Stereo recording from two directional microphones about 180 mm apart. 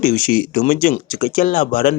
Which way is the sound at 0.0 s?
55° left (ahead or behind).